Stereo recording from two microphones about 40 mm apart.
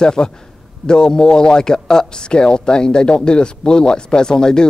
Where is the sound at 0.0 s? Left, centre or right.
Left.